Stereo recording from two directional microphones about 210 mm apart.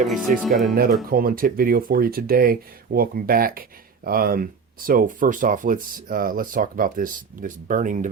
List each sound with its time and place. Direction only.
0.1 s speech: centre (ahead or behind)
1.1 s speech: 45° right (ahead or behind)